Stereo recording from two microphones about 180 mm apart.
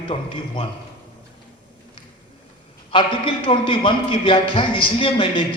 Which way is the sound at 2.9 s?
30° left (ahead or behind).